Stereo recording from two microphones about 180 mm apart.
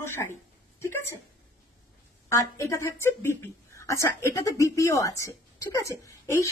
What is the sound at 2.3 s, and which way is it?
A woman's voice, 15° left (ahead or behind).